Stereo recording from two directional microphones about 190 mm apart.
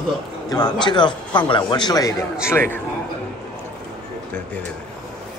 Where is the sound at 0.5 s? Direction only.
20° left (ahead or behind).